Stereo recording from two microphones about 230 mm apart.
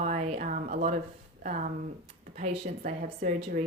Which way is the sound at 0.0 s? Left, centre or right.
Right.